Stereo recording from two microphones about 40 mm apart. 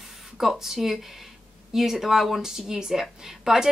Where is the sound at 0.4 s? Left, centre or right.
Centre.